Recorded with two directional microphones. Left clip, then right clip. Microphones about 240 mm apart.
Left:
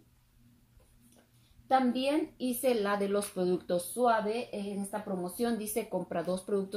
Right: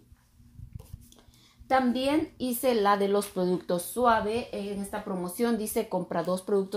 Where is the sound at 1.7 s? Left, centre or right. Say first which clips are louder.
Right 3 dB; right.